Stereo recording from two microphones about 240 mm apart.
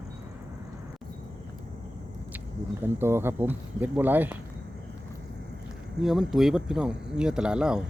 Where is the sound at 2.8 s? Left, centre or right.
Centre.